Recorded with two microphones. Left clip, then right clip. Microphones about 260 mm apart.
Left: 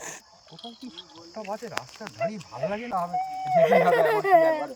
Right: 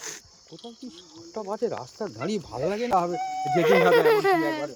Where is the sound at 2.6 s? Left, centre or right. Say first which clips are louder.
Right 2 dB; right.